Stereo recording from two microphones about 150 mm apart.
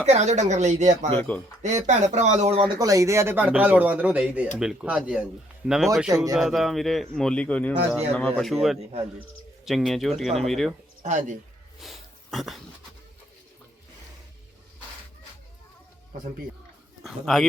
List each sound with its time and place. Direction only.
0.0 s speech: 50° right (ahead or behind)
1.1 s speech: 10° left (ahead or behind)
1.6 s speech: 50° right (ahead or behind)
2.7 s a man's voice: 20° right (ahead or behind); by 10.8 s centre (ahead or behind)
11.0 s speech: 55° right (ahead or behind)
11.8 s a sound: centre (ahead or behind)
17.0 s speech: centre (ahead or behind)